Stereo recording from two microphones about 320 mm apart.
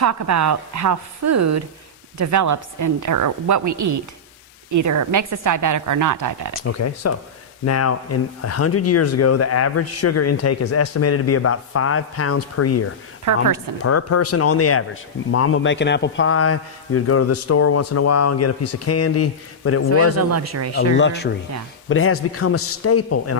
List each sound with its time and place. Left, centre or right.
0.0 s a woman's voice: right
6.5 s speech: left
13.3 s a woman's voice: right
13.8 s speech: left
20.1 s speech: right
21.0 s speech: left